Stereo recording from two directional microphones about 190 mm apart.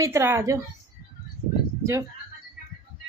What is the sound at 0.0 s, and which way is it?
Speech, 15° right (ahead or behind).